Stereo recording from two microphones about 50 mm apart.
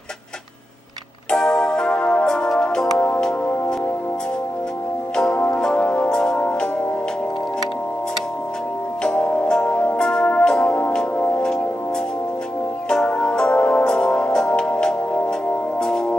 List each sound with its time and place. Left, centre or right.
1.3 s music: centre
5.1 s music: centre
6.0 s music: centre
9.0 s music: centre
12.9 s music: centre